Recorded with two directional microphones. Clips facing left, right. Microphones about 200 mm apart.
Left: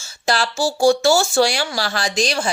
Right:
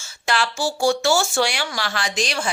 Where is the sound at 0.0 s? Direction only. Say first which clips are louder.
Left 2 dB; 35° left (ahead or behind).